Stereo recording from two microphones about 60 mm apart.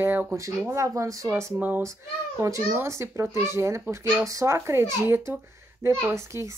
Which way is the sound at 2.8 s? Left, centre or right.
Right.